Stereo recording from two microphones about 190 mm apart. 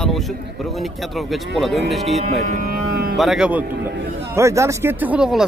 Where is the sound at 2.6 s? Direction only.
50° right (ahead or behind).